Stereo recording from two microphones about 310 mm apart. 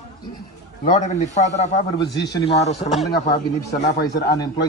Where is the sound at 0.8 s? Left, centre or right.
Left.